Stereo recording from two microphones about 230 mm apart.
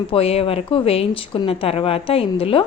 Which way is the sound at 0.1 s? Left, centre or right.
Left.